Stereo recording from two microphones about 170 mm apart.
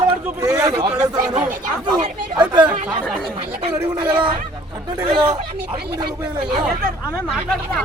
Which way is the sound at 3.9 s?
30° right (ahead or behind).